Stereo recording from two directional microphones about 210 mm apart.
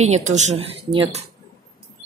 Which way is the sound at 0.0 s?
30° right (ahead or behind).